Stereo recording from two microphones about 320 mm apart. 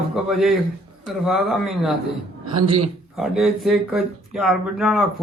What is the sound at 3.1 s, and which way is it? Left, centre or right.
Speech, centre.